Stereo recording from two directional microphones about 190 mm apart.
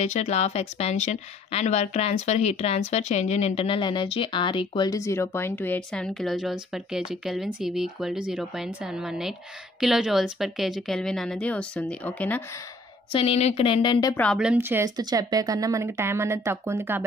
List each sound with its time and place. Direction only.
0.0 s speech: 35° left (ahead or behind); by 12.4 s 10° left (ahead or behind)
13.1 s speech: 30° left (ahead or behind)
14.2 s speech: centre (ahead or behind)
15.0 s speech: 20° right (ahead or behind)